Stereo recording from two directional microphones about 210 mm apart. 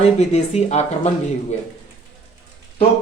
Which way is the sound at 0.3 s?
35° left (ahead or behind).